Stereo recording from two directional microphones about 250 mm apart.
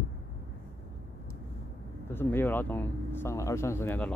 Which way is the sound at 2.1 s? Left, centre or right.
Centre.